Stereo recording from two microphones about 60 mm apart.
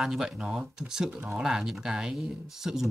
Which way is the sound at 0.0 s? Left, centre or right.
Centre.